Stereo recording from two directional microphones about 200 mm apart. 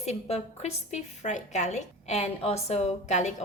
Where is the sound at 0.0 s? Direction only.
35° left (ahead or behind).